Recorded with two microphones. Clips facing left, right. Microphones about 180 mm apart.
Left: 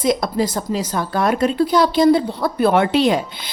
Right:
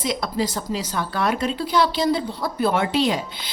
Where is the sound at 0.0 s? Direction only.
50° left (ahead or behind).